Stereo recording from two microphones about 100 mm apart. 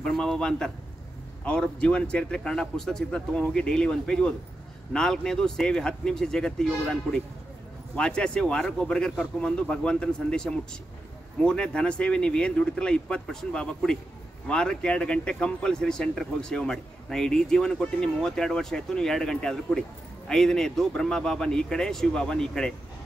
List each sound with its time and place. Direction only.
0.0 s a man's voice: 5° left (ahead or behind)